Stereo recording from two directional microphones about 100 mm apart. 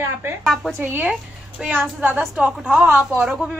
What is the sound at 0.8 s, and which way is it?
A woman's voice, 20° right (ahead or behind).